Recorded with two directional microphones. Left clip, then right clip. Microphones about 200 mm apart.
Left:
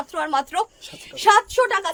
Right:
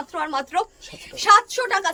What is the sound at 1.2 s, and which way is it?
Speech, 20° left (ahead or behind).